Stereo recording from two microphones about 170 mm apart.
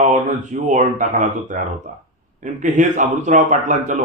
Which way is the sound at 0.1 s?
50° right (ahead or behind).